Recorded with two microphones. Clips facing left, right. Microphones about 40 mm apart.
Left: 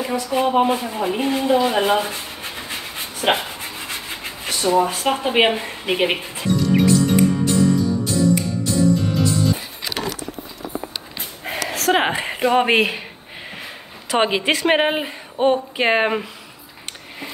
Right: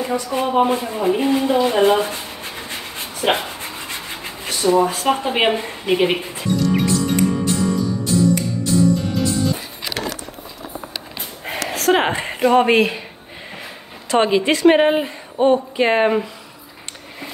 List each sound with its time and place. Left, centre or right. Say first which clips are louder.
0.3 s a sound: left 1 dB; centre
5.2 s speech: left 1 dB; centre
6.1 s music: even; centre
11.4 s a sound: right 2 dB; centre
12.6 s speech: right 2 dB; centre
14.1 s a woman's voice: right 2 dB; left